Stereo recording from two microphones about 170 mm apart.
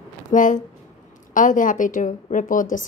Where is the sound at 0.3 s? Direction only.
50° left (ahead or behind).